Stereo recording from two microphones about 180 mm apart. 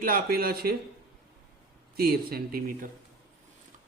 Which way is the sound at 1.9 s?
55° right (ahead or behind).